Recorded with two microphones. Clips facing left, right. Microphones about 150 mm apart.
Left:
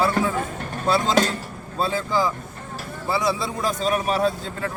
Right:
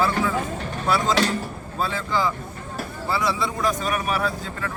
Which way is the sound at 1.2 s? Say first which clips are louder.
Left 2 dB; 45° left (ahead or behind).